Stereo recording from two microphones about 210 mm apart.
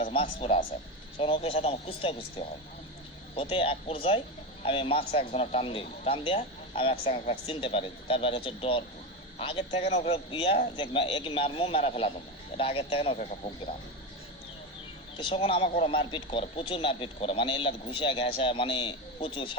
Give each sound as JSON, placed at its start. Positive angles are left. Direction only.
{"t": 0.0, "sound": "a man's voice", "side_deg": 25}
{"t": 3.3, "sound": "a man's voice", "side_deg": 25}
{"t": 15.3, "sound": "a man's voice", "side_deg": 25}